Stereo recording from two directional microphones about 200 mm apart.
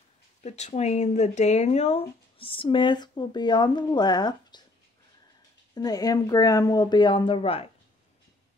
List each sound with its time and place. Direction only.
0.4 s speech: 35° left (ahead or behind)
5.8 s speech: 20° left (ahead or behind)